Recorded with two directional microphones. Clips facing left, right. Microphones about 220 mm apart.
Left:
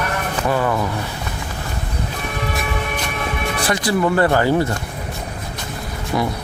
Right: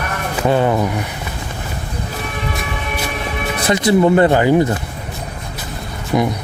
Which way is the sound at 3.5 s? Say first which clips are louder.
Right 7 dB; 20° right (ahead or behind).